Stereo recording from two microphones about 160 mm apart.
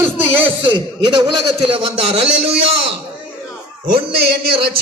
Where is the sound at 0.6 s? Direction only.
30° right (ahead or behind).